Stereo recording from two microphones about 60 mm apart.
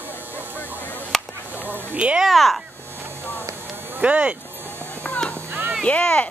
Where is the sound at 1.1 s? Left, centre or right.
Centre.